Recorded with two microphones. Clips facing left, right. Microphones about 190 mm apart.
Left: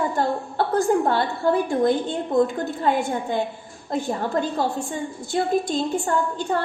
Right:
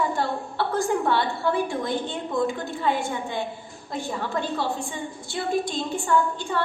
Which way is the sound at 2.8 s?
45° left (ahead or behind).